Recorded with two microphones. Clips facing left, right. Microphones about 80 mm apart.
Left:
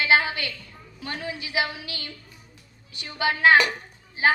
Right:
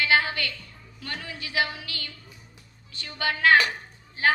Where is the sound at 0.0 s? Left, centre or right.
Left.